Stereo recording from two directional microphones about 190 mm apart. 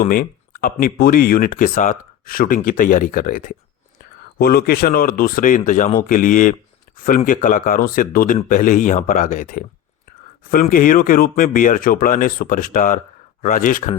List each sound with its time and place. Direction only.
0.0 s speech: 50° left (ahead or behind)